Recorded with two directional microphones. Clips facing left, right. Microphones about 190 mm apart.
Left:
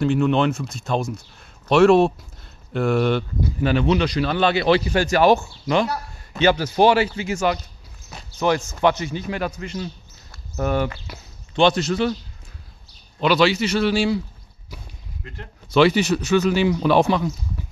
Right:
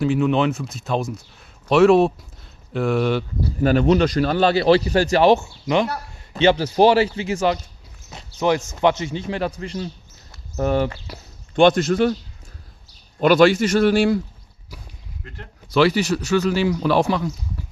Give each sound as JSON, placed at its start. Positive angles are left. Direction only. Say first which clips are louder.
{"t": 0.0, "sound": "speech", "louder": "even", "side_deg": -5}
{"t": 3.4, "sound": "a man's voice", "louder": "right 4 dB", "side_deg": -40}
{"t": 11.5, "sound": "speech", "louder": "right 3 dB", "side_deg": -50}
{"t": 13.2, "sound": "speech", "louder": "right 4 dB", "side_deg": -50}
{"t": 15.2, "sound": "a man's voice", "louder": "left 2 dB", "side_deg": 20}